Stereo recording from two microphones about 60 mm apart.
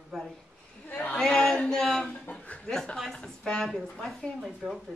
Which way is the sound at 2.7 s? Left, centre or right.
Centre.